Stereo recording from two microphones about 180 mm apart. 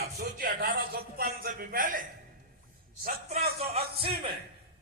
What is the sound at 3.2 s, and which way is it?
Music, 35° right (ahead or behind).